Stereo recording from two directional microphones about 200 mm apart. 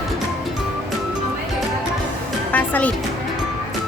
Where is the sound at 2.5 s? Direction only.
10° left (ahead or behind).